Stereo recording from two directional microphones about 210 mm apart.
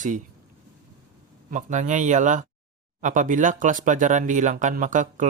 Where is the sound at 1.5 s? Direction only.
35° right (ahead or behind).